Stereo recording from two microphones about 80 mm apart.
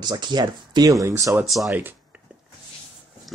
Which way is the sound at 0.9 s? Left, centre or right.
Right.